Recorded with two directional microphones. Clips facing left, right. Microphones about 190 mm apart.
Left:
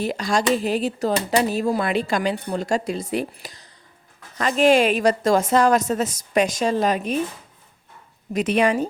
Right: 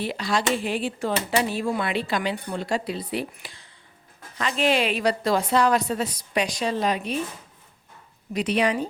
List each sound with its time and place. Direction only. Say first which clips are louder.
0.0 s a woman's voice: left 4 dB; 45° left (ahead or behind)
8.3 s a woman's voice: left 4 dB; 50° left (ahead or behind)